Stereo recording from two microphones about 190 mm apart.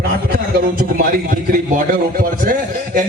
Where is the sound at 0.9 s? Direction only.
50° right (ahead or behind).